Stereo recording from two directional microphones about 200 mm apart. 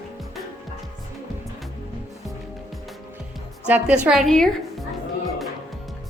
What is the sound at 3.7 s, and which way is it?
Speech, 5° right (ahead or behind).